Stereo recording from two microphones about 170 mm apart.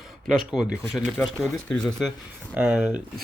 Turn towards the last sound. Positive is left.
turn(degrees=-5)  # may be behind; listen again after turning